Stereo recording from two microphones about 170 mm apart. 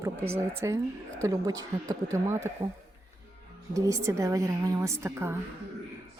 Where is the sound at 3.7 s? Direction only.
20° right (ahead or behind).